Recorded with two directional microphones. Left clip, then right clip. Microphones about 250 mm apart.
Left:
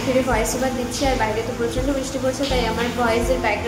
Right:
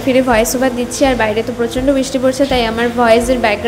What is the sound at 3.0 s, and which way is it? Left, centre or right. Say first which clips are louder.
Speech: right 10 dB; right.